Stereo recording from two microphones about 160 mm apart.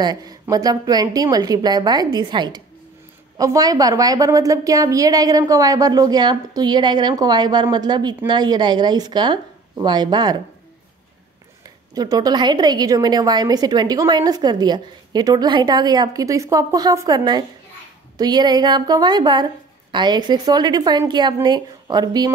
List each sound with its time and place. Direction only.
0.0 s a woman's voice: 25° right (ahead or behind)
11.6 s a woman's voice: 25° right (ahead or behind)